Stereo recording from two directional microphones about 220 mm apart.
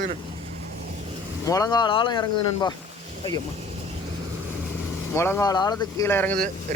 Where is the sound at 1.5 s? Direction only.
15° left (ahead or behind).